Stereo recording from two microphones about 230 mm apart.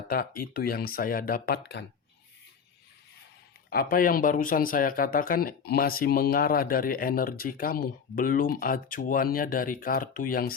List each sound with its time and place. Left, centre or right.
0.1 s speech: left
3.7 s speech: left